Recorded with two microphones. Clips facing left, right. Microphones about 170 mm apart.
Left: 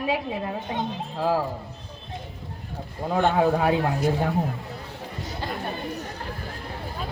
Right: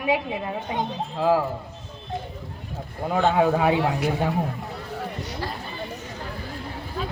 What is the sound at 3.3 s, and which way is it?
Speech, 15° right (ahead or behind).